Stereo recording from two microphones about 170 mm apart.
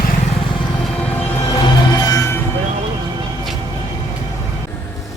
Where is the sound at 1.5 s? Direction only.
20° left (ahead or behind).